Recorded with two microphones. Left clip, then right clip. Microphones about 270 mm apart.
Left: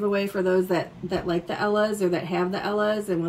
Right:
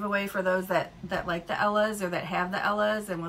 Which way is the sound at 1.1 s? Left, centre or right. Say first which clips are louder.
Left 3 dB; right.